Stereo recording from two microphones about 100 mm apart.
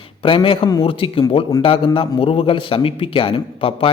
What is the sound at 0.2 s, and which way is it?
A man's voice, 60° left (ahead or behind).